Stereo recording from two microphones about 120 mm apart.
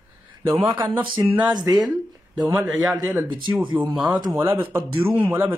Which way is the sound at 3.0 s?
20° right (ahead or behind).